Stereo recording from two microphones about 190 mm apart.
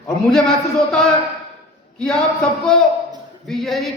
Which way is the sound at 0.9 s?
5° left (ahead or behind).